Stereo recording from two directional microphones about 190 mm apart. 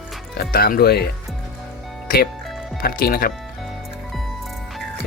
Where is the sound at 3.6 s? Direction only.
Centre (ahead or behind).